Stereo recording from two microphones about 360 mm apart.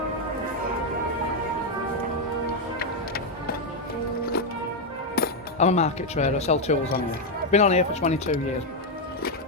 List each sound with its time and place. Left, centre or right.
5.1 s speech: left